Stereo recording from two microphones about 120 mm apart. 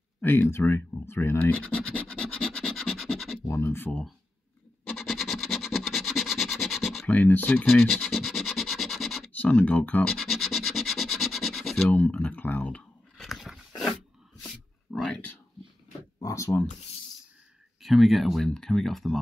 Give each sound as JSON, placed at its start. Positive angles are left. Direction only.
{"t": 0.2, "sound": "speech", "side_deg": 20}
{"t": 1.6, "sound": "scratch", "side_deg": 10}
{"t": 3.4, "sound": "speech", "side_deg": 25}
{"t": 4.9, "sound": "scratch", "side_deg": 0}
{"t": 7.1, "sound": "speech", "side_deg": 15}
{"t": 7.9, "sound": "scratch", "side_deg": 0}
{"t": 9.3, "sound": "speech", "side_deg": 10}
{"t": 10.3, "sound": "scratch", "side_deg": 0}
{"t": 11.9, "sound": "speech", "side_deg": 10}
{"t": 13.2, "sound": "dog", "side_deg": 0}
{"t": 16.2, "sound": "a sound", "side_deg": 30}
{"t": 17.8, "sound": "speech", "side_deg": 0}